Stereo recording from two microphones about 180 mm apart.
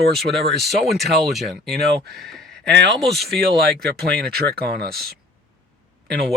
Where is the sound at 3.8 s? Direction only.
60° right (ahead or behind).